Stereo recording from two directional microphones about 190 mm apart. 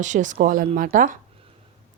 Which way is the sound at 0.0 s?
40° right (ahead or behind).